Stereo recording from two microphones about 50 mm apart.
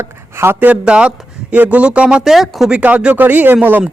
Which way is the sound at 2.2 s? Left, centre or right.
Centre.